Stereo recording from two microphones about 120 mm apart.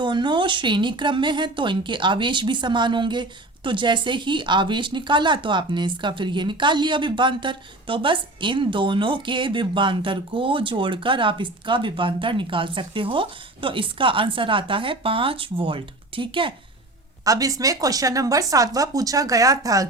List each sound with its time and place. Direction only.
0.0 s a woman's voice: 40° right (ahead or behind)
17.2 s speech: 30° right (ahead or behind)